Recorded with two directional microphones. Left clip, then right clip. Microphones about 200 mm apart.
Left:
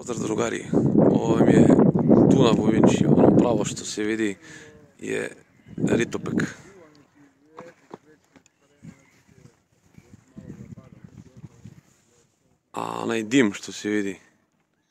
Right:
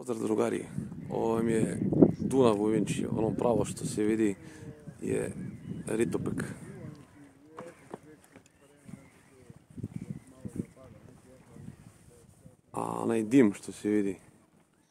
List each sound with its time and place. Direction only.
0.0 s speech: centre (ahead or behind)
7.5 s a sound: 35° left (ahead or behind)
12.7 s speech: centre (ahead or behind)